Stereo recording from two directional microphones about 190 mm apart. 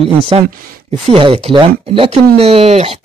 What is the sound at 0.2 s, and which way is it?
Speech, 30° right (ahead or behind).